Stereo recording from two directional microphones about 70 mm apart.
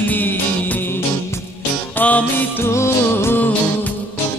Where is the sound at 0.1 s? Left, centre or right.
Left.